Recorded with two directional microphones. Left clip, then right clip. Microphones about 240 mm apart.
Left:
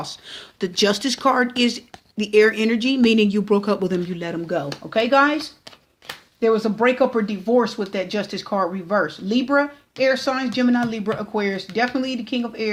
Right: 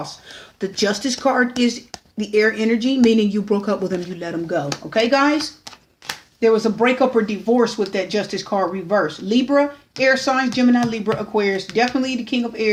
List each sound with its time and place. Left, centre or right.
0.0 s speech: left
6.4 s speech: left